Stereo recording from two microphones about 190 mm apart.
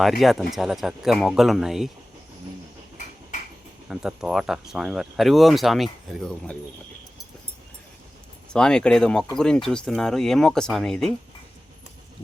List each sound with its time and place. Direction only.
0.0 s speech: centre (ahead or behind)
3.8 s speech: 5° right (ahead or behind)
8.4 s speech: 5° left (ahead or behind)